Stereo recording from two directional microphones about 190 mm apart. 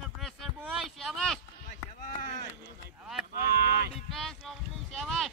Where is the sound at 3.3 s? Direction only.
55° right (ahead or behind).